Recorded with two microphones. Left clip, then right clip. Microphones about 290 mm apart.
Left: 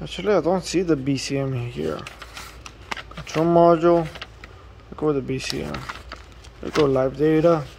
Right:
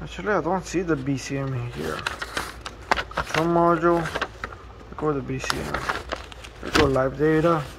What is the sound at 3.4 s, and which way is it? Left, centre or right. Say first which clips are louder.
Speech: left 5 dB; left.